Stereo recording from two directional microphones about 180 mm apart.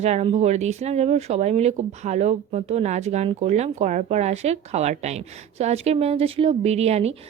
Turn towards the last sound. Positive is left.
turn(degrees=-35)  # may be behind; listen again after turning